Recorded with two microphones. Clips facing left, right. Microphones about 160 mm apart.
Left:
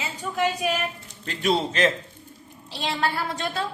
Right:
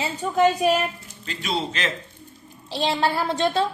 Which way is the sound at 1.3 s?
50° left (ahead or behind).